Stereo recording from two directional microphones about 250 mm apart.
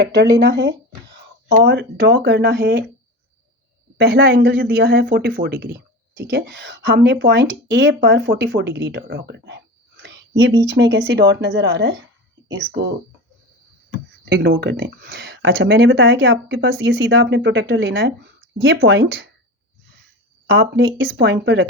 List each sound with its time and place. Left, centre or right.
0.1 s speech: right
3.9 s speech: right
10.0 s a sound: right
10.8 s speech: right
14.3 s speech: right
20.5 s speech: right